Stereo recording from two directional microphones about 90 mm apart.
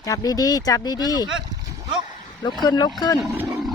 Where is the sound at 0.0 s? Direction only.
40° left (ahead or behind).